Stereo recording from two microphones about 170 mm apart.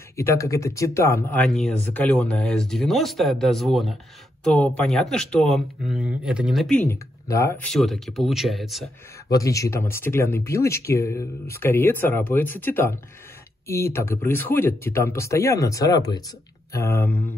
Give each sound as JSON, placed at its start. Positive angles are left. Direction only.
{"t": 0.1, "sound": "speech", "side_deg": 15}
{"t": 1.6, "sound": "speech", "side_deg": 5}
{"t": 7.6, "sound": "speech", "side_deg": 0}
{"t": 9.3, "sound": "speech", "side_deg": 20}